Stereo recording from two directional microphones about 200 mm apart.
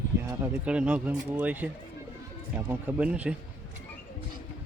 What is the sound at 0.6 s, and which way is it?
Speech, 5° right (ahead or behind).